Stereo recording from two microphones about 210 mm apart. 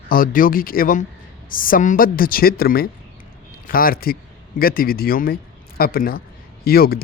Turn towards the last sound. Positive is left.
turn(degrees=45)  # may be behind; listen again after turning